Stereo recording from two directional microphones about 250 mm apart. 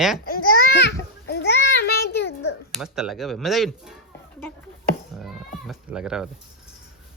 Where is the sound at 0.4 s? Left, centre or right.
Left.